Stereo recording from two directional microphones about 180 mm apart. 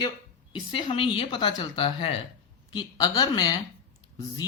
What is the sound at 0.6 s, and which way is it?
Speech, 25° left (ahead or behind).